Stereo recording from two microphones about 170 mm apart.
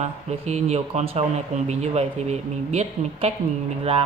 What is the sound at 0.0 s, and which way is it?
Speech, 40° right (ahead or behind).